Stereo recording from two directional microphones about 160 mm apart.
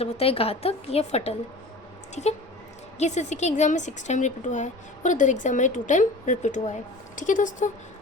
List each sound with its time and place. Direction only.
0.0 s a woman's voice: 35° left (ahead or behind)
3.0 s a woman's voice: 45° left (ahead or behind)